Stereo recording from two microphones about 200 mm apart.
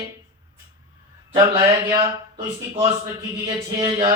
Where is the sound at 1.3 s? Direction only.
20° right (ahead or behind).